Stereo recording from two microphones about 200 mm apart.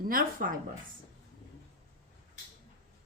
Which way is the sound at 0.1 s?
45° right (ahead or behind).